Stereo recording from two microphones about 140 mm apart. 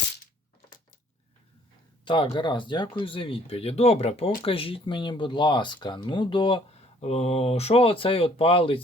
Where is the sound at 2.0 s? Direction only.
35° left (ahead or behind).